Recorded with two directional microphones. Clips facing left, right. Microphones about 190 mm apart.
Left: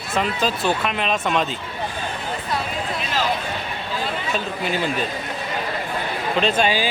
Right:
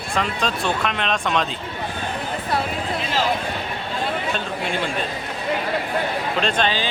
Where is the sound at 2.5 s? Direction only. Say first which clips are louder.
Right 3 dB; 55° right (ahead or behind).